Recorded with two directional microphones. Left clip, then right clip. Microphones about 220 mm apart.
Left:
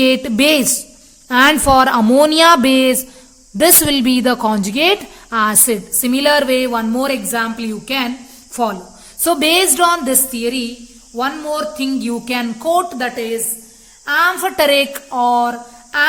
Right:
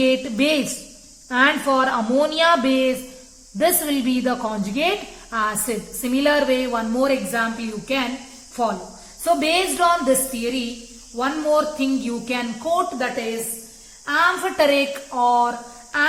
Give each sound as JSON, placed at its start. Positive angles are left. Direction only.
{"t": 0.0, "sound": "a woman's voice", "side_deg": 50}